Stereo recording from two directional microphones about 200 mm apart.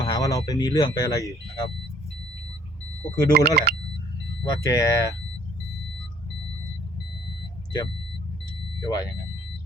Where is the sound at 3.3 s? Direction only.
50° right (ahead or behind).